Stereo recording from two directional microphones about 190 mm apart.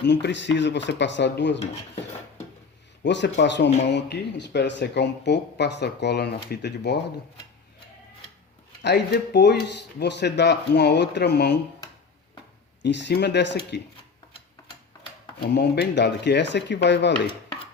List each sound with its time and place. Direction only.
0.0 s speech: 65° left (ahead or behind)
3.0 s speech: 70° left (ahead or behind)
8.8 s speech: 65° left (ahead or behind)
12.8 s speech: 65° left (ahead or behind)
15.4 s speech: 60° left (ahead or behind)